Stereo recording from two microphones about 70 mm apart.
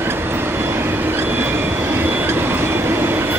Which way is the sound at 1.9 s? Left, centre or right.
Right.